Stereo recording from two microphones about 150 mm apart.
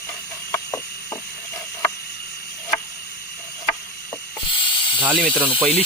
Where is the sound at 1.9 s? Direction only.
90° left.